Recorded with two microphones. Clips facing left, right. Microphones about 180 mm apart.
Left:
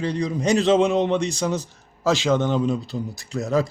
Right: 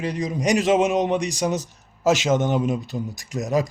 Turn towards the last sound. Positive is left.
turn(degrees=-15)  # may be behind; listen again after turning